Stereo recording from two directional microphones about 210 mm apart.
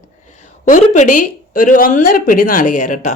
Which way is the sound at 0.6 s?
35° left (ahead or behind).